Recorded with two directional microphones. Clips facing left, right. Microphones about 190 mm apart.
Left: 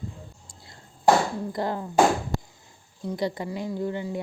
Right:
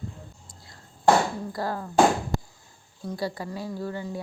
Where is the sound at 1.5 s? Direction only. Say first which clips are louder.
Left 3 dB; 20° left (ahead or behind).